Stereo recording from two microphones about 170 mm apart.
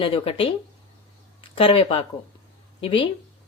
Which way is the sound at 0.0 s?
35° left (ahead or behind).